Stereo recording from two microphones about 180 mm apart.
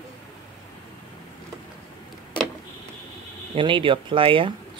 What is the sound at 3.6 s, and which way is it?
Speech, 30° right (ahead or behind).